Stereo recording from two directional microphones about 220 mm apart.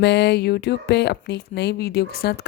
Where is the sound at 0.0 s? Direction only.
50° left (ahead or behind).